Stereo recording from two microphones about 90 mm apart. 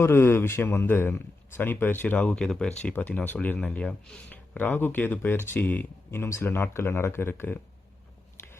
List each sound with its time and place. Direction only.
0.0 s a man's voice: 25° left (ahead or behind)